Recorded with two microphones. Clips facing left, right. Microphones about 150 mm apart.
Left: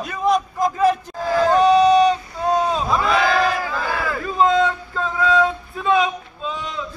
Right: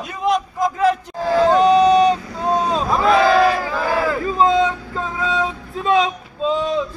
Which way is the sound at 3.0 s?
Centre (ahead or behind).